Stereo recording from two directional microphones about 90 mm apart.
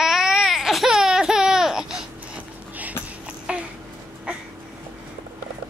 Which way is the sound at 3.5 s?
15° right (ahead or behind).